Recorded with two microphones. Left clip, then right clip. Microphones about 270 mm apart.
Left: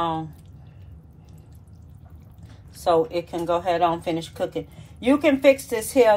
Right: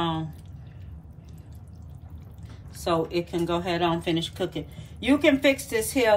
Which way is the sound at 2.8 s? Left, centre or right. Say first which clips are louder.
Left 5 dB; centre.